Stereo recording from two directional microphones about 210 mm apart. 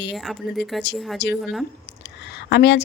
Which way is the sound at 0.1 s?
Centre (ahead or behind).